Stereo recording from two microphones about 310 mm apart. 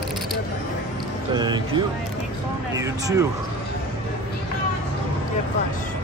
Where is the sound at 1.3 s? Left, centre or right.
Centre.